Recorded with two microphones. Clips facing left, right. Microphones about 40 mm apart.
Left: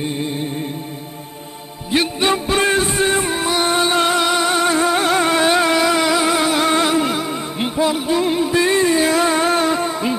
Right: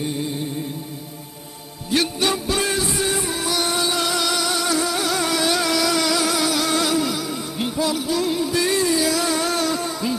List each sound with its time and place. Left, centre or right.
1.9 s music: left